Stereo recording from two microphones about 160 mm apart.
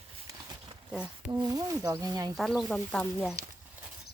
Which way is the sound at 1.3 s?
25° right (ahead or behind).